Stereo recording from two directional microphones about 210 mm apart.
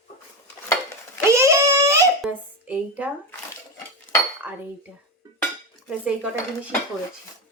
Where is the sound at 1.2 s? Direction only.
15° right (ahead or behind).